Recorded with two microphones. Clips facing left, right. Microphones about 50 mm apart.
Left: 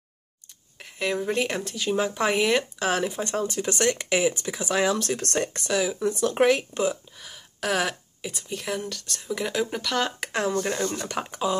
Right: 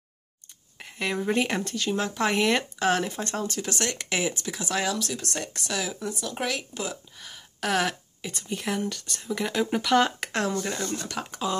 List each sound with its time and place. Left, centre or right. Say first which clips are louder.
0.7 s speech: left 2 dB; centre
3.9 s speech: left 5 dB; centre
4.9 s speech: left 4 dB; left
5.4 s speech: left 6 dB; left
5.7 s speech: left 5 dB; centre
6.1 s speech: left 14 dB; left
6.5 s speech: left 8 dB; left
7.2 s a sound: even; centre
8.5 s speech: right 2 dB; centre
10.3 s speech: left 2 dB; centre